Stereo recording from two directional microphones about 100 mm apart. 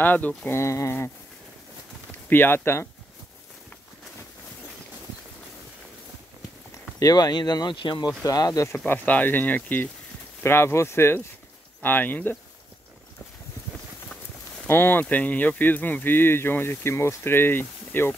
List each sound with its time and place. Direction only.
0.0 s speech: 20° left (ahead or behind)
0.5 s speech: 30° left (ahead or behind)
2.2 s speech: 20° left (ahead or behind)
6.7 s speech: 35° left (ahead or behind); by 8.1 s 50° left (ahead or behind)
8.2 s speech: 35° left (ahead or behind)
8.7 s speech: 20° left (ahead or behind)
14.7 s speech: 20° left (ahead or behind)